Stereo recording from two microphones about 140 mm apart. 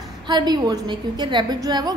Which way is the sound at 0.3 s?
30° right (ahead or behind).